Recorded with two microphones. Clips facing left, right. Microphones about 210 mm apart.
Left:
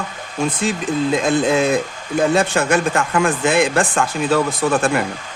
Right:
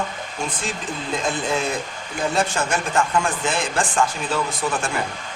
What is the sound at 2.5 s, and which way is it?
Speech, 65° left (ahead or behind).